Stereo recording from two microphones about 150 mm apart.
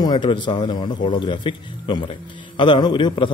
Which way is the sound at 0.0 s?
30° left (ahead or behind).